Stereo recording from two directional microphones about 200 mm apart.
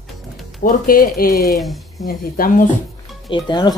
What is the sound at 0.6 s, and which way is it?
Speech, 45° left (ahead or behind).